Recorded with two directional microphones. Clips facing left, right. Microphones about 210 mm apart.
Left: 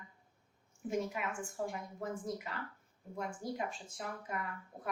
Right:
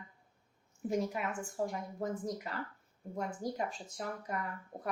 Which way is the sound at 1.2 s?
40° right (ahead or behind).